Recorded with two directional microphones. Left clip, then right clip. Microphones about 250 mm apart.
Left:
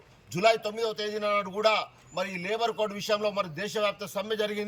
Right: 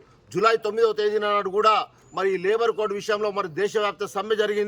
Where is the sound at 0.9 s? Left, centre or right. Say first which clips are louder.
Right 6 dB; right.